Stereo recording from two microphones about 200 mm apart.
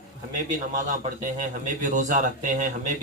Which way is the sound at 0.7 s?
40° right (ahead or behind).